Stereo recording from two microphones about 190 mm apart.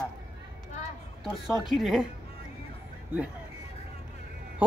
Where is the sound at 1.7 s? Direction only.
Centre (ahead or behind).